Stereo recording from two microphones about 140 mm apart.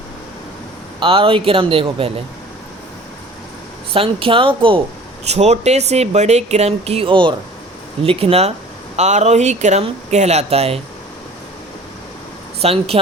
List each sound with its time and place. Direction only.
0.9 s speech: 40° right (ahead or behind)
3.9 s speech: 40° right (ahead or behind)
5.2 s speech: 50° right (ahead or behind)
12.6 s speech: 45° right (ahead or behind)